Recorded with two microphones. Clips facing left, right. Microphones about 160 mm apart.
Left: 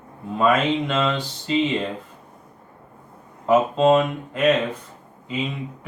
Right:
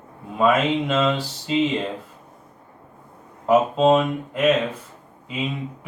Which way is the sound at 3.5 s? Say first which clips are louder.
Even; centre (ahead or behind).